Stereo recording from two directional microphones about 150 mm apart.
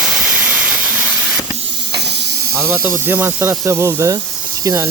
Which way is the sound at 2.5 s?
10° right (ahead or behind).